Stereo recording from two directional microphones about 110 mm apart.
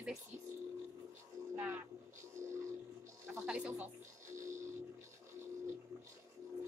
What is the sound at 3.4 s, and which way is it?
Speech, 10° right (ahead or behind).